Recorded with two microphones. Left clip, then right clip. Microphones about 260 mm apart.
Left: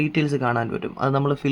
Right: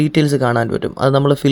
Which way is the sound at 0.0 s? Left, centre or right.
Right.